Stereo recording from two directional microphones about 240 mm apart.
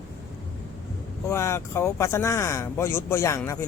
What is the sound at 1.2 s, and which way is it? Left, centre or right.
Speech, centre.